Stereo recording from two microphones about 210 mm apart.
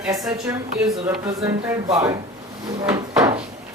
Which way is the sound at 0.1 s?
15° right (ahead or behind).